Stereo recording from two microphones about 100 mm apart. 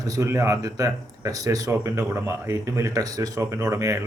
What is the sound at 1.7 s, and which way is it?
A man's voice, 25° right (ahead or behind).